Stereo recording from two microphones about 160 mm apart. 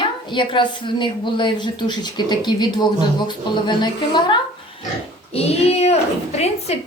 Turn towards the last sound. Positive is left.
turn(degrees=40)  # may be behind; listen again after turning